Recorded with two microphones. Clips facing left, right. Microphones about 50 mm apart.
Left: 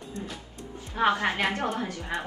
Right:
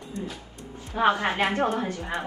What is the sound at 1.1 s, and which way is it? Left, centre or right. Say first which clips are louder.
Speech: right 3 dB; right.